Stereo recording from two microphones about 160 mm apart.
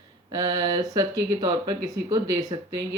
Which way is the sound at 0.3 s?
25° right (ahead or behind).